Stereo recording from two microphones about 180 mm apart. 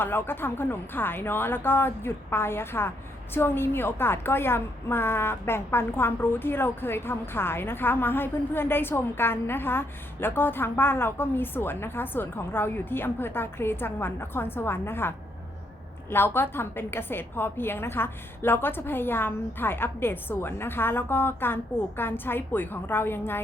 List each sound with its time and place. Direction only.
0.0 s a woman's voice: 10° left (ahead or behind)